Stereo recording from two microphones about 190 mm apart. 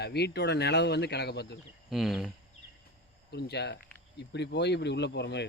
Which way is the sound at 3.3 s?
60° left (ahead or behind).